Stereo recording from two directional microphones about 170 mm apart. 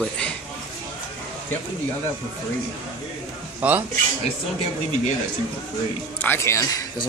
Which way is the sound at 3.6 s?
5° right (ahead or behind).